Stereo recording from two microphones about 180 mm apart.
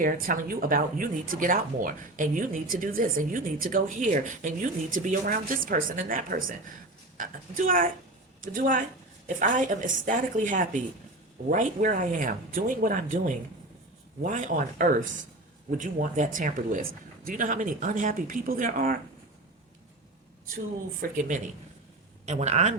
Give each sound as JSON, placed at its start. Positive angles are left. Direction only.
{"t": 0.0, "sound": "speech", "side_deg": -55}
{"t": 21.0, "sound": "speech", "side_deg": -45}